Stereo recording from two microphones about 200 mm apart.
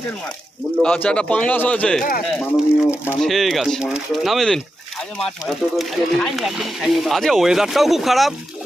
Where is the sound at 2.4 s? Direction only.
Centre (ahead or behind).